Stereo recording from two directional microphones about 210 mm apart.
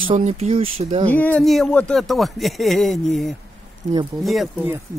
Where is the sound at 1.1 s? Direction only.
5° left (ahead or behind).